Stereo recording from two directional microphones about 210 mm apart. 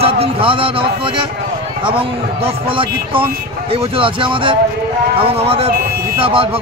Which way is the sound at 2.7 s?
25° right (ahead or behind).